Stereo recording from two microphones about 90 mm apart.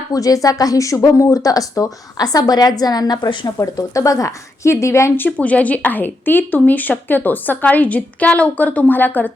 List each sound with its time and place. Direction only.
0.1 s a woman's voice: 40° left (ahead or behind)
3.6 s speech: 40° left (ahead or behind); by 9.3 s 20° left (ahead or behind)